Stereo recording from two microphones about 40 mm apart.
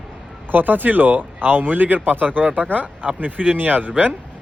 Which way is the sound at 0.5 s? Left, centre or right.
Right.